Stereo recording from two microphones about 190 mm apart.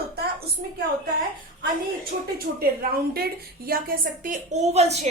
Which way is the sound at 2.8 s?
50° right (ahead or behind).